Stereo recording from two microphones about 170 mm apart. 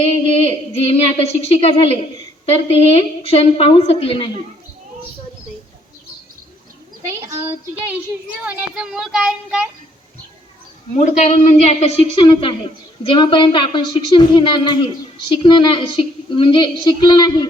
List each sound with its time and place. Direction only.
0.3 s a woman's voice: 35° left (ahead or behind)
7.1 s a woman's voice: 15° right (ahead or behind)
8.4 s speech: 5° right (ahead or behind)
10.9 s a woman's voice: 40° left (ahead or behind); by 17.5 s 25° left (ahead or behind)